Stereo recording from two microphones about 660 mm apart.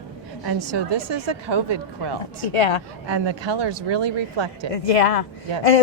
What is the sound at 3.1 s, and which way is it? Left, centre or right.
A woman's voice, right.